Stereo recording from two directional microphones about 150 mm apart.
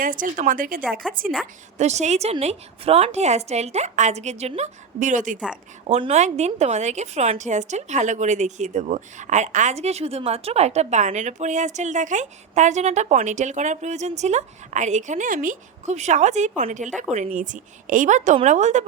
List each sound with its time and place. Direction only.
0.0 s speech: 65° right (ahead or behind)
1.0 s a woman's voice: 5° left (ahead or behind)
1.8 s a woman's voice: 50° right (ahead or behind)
5.9 s a woman's voice: 45° right (ahead or behind)